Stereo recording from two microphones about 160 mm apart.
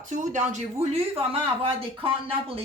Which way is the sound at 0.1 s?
50° right (ahead or behind).